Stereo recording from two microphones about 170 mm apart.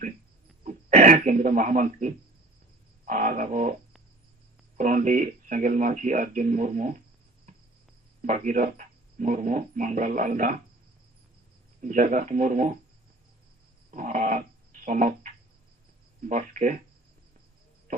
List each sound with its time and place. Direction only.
0.6 s throat clearing: 45° right (ahead or behind)
3.1 s speech: 50° right (ahead or behind)
4.8 s speech: 50° right (ahead or behind)
8.2 s speech: 50° right (ahead or behind)
11.8 s speech: 50° right (ahead or behind)
13.9 s dog: 50° right (ahead or behind)
16.3 s speech: 50° right (ahead or behind)